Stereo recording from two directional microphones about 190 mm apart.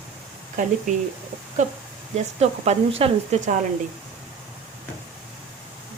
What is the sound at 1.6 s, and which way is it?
Speech, 40° right (ahead or behind).